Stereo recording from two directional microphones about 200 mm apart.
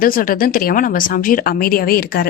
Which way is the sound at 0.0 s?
45° left (ahead or behind).